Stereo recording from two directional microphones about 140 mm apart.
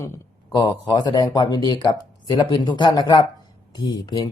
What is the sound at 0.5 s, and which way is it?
Speech, 30° left (ahead or behind).